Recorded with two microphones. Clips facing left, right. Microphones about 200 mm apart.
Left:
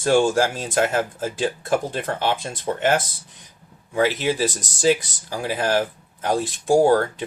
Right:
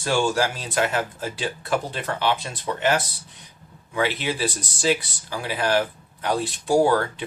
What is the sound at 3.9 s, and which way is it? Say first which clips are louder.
Speech: left 4 dB; 40° left (ahead or behind).